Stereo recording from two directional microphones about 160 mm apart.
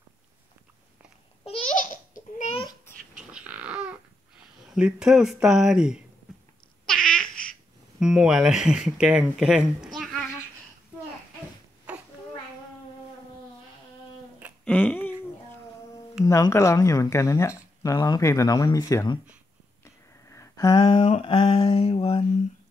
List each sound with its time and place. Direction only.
1.4 s babbling: 40° left (ahead or behind)
2.5 s babbling: 25° left (ahead or behind)
3.2 s a sound: 5° right (ahead or behind)
4.7 s speech: 5° right (ahead or behind)
6.9 s babbling: 5° left (ahead or behind)
8.0 s speech: 5° right (ahead or behind)
14.6 s a sound: 10° left (ahead or behind)
16.3 s speech: 20° left (ahead or behind)
19.8 s a sound: 20° left (ahead or behind)
20.8 s mantra: 40° left (ahead or behind)